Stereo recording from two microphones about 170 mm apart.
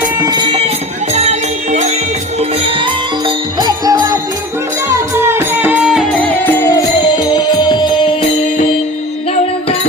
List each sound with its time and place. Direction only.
0.2 s music: 25° right (ahead or behind)
1.1 s music: 40° right (ahead or behind)
2.4 s music: 30° right (ahead or behind); by 6.7 s 10° left (ahead or behind)
7.2 s music: 25° left (ahead or behind)